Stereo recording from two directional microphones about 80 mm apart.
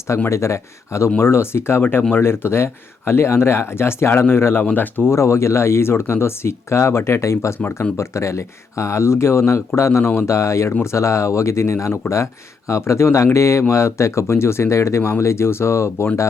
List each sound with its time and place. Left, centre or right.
0.3 s speech: left
5.1 s speech: left